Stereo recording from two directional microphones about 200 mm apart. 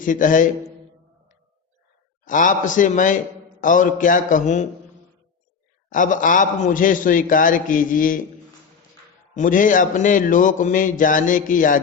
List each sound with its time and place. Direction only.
0.0 s mantra: 40° left (ahead or behind)
2.2 s mantra: 40° left (ahead or behind)
5.9 s mantra: 40° left (ahead or behind)
9.3 s mantra: 40° left (ahead or behind)